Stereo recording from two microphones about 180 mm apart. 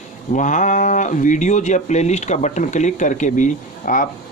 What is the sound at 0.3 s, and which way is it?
Speech, 45° left (ahead or behind).